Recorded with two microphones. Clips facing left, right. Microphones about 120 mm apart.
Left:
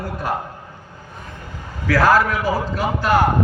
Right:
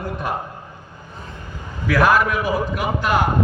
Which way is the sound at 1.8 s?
20° right (ahead or behind).